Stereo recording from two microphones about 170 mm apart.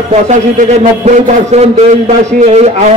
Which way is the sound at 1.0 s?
40° right (ahead or behind).